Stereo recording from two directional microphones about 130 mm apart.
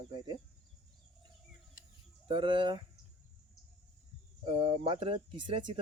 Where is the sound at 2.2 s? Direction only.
40° right (ahead or behind).